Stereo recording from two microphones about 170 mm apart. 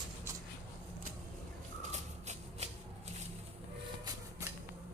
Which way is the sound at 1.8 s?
40° right (ahead or behind).